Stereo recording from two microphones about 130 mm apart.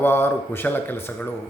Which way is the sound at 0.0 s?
15° left (ahead or behind).